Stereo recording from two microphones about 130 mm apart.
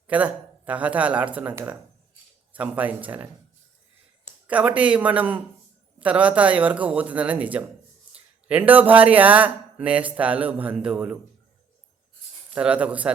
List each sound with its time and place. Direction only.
0.1 s speech: 10° right (ahead or behind)
4.3 s speech: 10° right (ahead or behind)
12.5 s speech: 10° right (ahead or behind)